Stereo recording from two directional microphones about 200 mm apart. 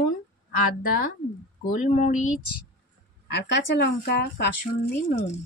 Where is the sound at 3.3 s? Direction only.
60° left (ahead or behind).